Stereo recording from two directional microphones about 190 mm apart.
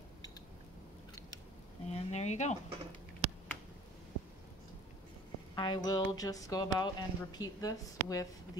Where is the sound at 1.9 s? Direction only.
35° left (ahead or behind).